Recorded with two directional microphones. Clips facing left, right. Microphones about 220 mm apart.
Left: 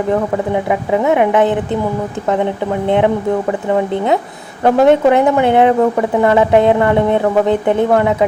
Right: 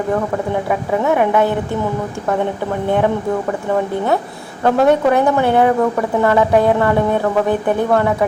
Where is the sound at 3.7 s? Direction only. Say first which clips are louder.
Left 2 dB; 20° left (ahead or behind).